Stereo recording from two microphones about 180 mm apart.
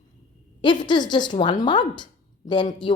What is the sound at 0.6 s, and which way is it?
A woman's voice, 25° left (ahead or behind).